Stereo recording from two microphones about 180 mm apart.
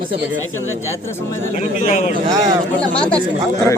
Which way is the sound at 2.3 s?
20° right (ahead or behind).